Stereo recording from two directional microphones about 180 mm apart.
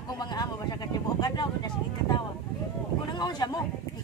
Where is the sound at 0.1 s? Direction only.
20° left (ahead or behind).